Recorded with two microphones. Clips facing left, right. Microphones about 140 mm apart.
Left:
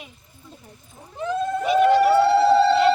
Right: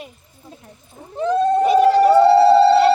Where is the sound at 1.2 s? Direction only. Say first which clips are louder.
Right 8 dB; 35° right (ahead or behind).